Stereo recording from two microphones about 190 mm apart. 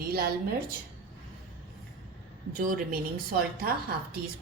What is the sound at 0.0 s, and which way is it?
Speech, 50° right (ahead or behind).